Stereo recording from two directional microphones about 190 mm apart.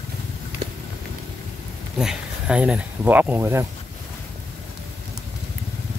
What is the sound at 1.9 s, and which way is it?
Speech, 5° right (ahead or behind).